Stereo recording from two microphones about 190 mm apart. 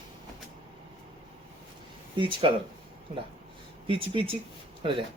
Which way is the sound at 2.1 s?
25° right (ahead or behind).